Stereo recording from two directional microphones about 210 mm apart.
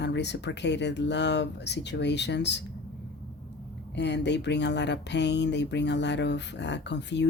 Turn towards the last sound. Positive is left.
turn(degrees=55)  # may be behind; listen again after turning